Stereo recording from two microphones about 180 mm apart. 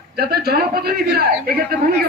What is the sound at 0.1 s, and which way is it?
A man's voice, 60° right (ahead or behind).